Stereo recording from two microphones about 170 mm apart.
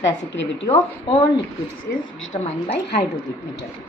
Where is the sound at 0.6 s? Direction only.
35° left (ahead or behind).